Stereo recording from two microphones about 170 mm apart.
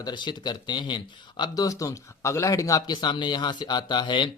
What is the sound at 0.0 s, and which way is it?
Speech, 25° left (ahead or behind).